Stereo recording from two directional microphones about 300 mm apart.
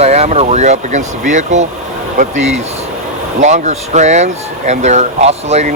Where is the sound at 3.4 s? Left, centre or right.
Right.